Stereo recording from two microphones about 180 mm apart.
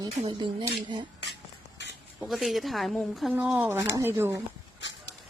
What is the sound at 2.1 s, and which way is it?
Speech, centre (ahead or behind).